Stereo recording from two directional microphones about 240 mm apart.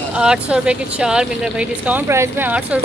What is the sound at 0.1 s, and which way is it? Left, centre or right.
Speech, centre.